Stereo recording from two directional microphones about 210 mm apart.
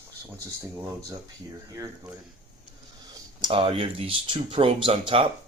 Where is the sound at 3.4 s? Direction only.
25° right (ahead or behind).